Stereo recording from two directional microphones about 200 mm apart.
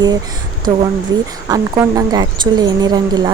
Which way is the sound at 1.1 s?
20° right (ahead or behind).